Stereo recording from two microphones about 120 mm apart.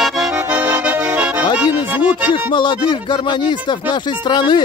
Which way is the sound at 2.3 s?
40° left (ahead or behind).